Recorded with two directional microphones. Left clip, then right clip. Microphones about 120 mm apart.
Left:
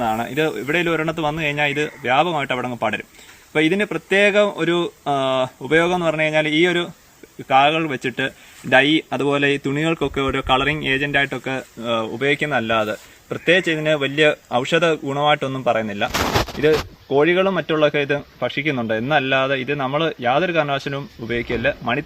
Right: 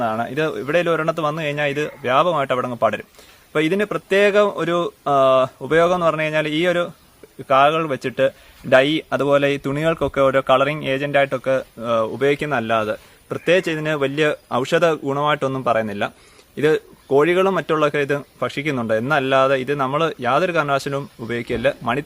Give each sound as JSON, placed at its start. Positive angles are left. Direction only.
{"t": 0.0, "sound": "speech", "side_deg": -35}